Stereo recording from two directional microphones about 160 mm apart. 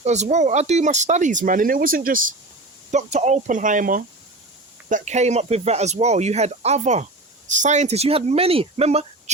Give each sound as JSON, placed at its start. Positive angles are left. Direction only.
{"t": 0.0, "sound": "speech", "side_deg": -45}
{"t": 2.9, "sound": "speech", "side_deg": -45}